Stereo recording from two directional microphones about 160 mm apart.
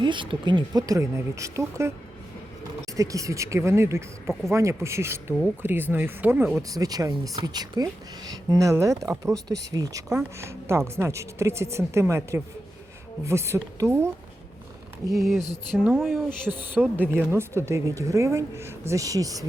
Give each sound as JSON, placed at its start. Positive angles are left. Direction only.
{"t": 0.0, "sound": "speech", "side_deg": -30}
{"t": 2.9, "sound": "speech", "side_deg": -20}
{"t": 6.6, "sound": "speech", "side_deg": -20}
{"t": 15.8, "sound": "speech", "side_deg": -10}